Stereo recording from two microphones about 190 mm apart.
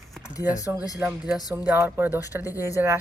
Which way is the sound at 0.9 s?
5° right (ahead or behind).